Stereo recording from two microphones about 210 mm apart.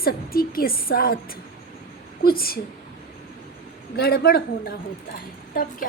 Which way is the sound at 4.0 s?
45° left (ahead or behind).